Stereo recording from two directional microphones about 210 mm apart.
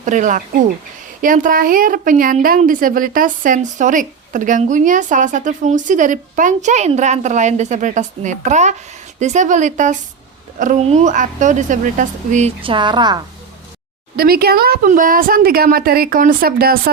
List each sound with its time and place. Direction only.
0.0 s a woman's voice: 35° right (ahead or behind); by 13.2 s 20° right (ahead or behind)
14.2 s a woman's voice: 45° right (ahead or behind)